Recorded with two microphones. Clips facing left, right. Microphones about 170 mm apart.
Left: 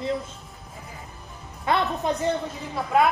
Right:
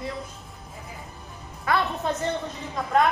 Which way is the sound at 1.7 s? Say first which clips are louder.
Left 1 dB; 25° left (ahead or behind).